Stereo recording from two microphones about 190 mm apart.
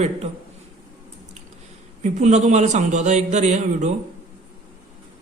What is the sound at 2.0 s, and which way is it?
Speech, 40° right (ahead or behind).